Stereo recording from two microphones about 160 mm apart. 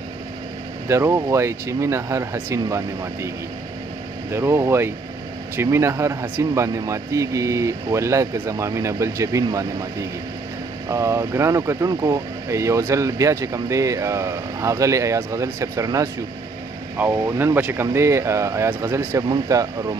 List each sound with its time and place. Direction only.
0.8 s speech: 15° right (ahead or behind)
4.3 s speech: 15° right (ahead or behind)